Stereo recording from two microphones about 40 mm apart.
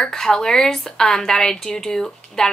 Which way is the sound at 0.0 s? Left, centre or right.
Centre.